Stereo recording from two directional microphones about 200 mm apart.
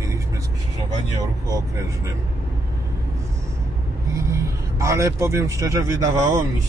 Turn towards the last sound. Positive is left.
turn(degrees=-15)  # may be behind; listen again after turning